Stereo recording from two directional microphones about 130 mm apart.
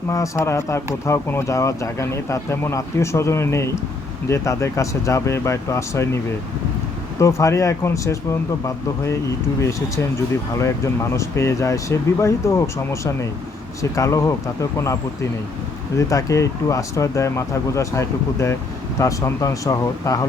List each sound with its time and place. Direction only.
0.1 s speech: 25° left (ahead or behind)
7.2 s speech: 25° left (ahead or behind)
16.0 s speech: 25° left (ahead or behind)